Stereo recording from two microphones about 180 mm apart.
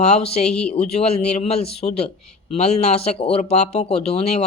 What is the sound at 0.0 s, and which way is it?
Speech, 35° left (ahead or behind).